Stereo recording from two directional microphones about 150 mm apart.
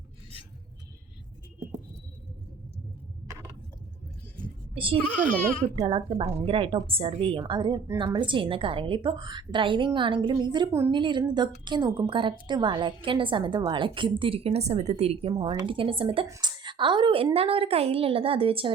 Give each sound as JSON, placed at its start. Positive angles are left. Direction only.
{"t": 4.7, "sound": "a child's voice", "side_deg": -35}
{"t": 10.7, "sound": "a woman's voice", "side_deg": -20}
{"t": 10.9, "sound": "a woman's voice", "side_deg": -30}
{"t": 15.3, "sound": "a woman's voice", "side_deg": -30}
{"t": 16.2, "sound": "a woman's voice", "side_deg": -25}